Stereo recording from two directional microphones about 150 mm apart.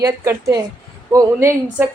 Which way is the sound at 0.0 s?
20° right (ahead or behind).